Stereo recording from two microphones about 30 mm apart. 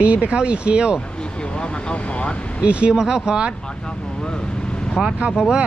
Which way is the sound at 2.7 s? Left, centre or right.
Right.